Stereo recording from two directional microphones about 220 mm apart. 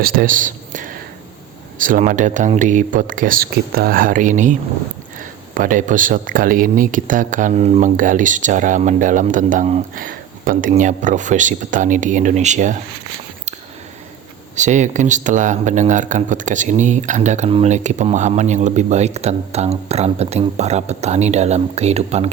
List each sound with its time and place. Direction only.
0.0 s speech: 40° right (ahead or behind)
5.5 s speech: 35° right (ahead or behind)
14.5 s speech: 35° right (ahead or behind)